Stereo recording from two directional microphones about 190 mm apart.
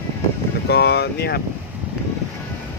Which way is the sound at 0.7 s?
60° left (ahead or behind).